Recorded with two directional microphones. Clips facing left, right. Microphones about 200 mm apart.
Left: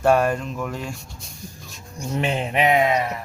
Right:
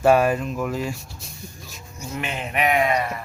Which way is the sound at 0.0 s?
5° right (ahead or behind).